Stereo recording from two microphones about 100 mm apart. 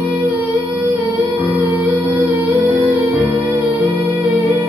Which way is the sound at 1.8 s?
15° right (ahead or behind).